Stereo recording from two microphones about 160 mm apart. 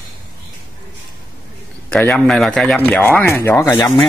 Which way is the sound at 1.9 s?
5° left (ahead or behind).